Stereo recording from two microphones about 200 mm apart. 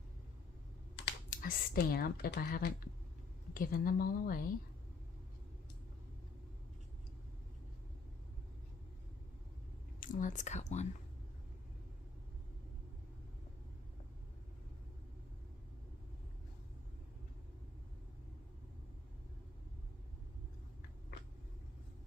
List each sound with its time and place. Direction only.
1.3 s speech: 45° left (ahead or behind)
10.0 s speech: 40° left (ahead or behind)